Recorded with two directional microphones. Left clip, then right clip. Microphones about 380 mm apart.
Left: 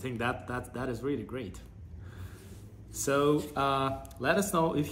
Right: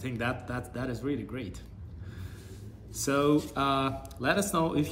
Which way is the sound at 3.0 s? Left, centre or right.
Centre.